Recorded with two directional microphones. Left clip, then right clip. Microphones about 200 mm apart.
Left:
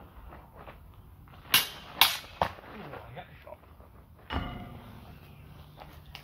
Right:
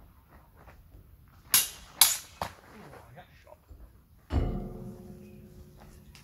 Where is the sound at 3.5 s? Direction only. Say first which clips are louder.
Left 6 dB; 45° right (ahead or behind).